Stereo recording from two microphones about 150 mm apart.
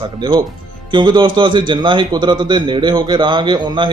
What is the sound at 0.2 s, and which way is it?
A man's voice, 30° right (ahead or behind).